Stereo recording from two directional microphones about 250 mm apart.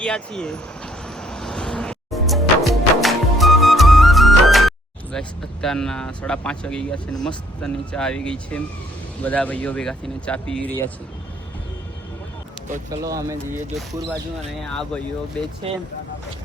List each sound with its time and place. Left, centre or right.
0.0 s speech: centre
1.0 s music: centre
5.1 s speech: centre
12.9 s speech: centre
15.6 s speech: right